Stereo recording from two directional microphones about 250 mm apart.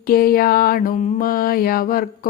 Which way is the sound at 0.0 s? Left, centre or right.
Left.